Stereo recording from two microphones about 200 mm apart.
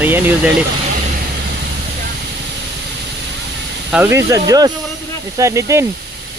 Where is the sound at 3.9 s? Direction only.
10° right (ahead or behind).